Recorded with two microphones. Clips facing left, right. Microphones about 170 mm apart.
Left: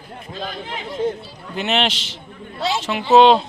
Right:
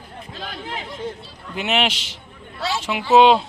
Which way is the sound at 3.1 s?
5° right (ahead or behind).